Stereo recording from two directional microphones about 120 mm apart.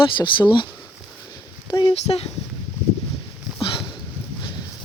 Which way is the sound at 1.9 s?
60° left (ahead or behind).